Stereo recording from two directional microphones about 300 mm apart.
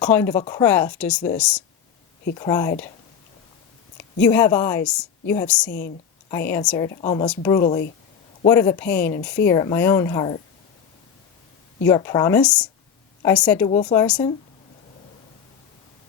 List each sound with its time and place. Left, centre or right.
0.0 s a woman's voice: centre
3.9 s a woman's voice: centre
11.9 s a woman's voice: centre
13.7 s speech: left
13.9 s speech: centre